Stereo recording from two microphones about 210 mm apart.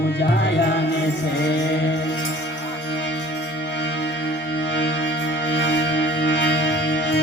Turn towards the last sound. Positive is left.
turn(degrees=55)  # may be behind; listen again after turning